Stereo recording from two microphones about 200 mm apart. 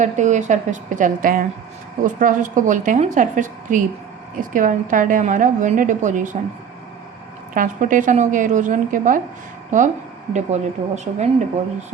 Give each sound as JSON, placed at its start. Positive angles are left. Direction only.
{"t": 0.0, "sound": "a woman's voice", "side_deg": -35}
{"t": 7.5, "sound": "a woman's voice", "side_deg": -40}